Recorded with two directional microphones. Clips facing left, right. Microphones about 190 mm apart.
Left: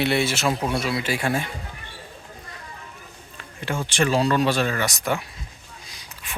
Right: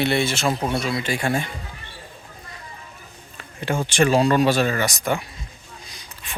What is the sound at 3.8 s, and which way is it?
A man's voice, 15° right (ahead or behind).